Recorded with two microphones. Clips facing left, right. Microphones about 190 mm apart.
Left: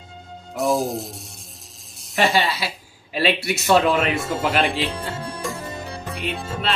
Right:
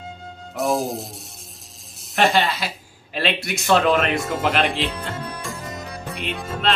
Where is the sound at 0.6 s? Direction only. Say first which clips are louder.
Left 1 dB; centre (ahead or behind).